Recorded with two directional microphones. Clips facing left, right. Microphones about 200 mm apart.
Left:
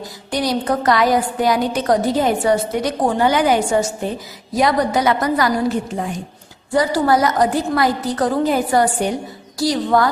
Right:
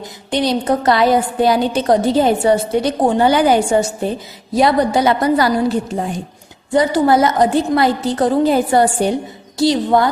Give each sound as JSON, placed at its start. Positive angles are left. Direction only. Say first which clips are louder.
{"t": 0.0, "sound": "a woman's voice", "louder": "right 3 dB", "side_deg": -25}